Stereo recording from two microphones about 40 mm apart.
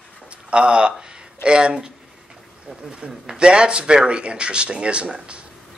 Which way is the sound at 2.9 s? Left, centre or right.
Right.